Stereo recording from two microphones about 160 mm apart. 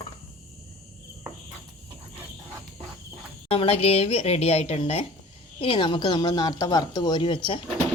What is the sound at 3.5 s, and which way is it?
Speech, 35° left (ahead or behind).